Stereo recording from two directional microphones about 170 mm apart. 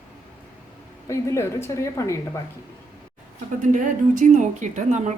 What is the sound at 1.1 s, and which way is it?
A woman's voice, 15° left (ahead or behind).